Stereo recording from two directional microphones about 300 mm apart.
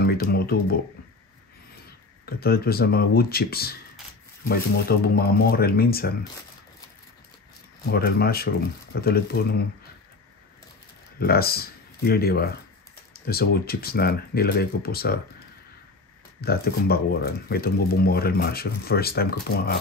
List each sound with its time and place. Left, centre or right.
0.0 s speech: left
2.2 s speech: left
7.9 s speech: left
11.1 s speech: left
16.3 s speech: left